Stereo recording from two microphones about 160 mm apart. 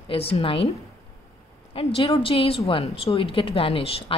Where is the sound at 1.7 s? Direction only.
35° left (ahead or behind).